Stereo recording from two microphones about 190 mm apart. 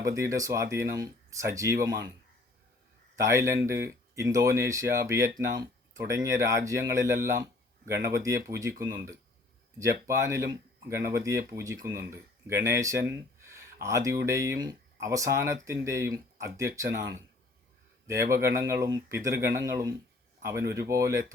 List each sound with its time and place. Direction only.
0.0 s speech: 15° right (ahead or behind)
3.2 s speech: 15° right (ahead or behind)
18.1 s speech: 15° right (ahead or behind)